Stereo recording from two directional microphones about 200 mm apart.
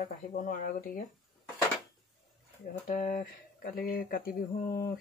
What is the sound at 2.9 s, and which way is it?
Speech, 40° left (ahead or behind).